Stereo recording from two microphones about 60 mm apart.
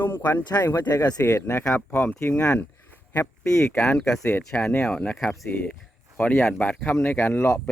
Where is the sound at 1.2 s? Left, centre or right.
Left.